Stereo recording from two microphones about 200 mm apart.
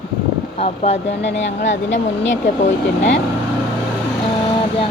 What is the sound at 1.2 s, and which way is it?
A woman's voice, 65° left (ahead or behind).